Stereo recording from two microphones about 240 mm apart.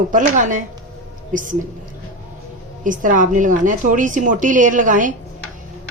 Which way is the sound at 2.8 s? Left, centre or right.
Right.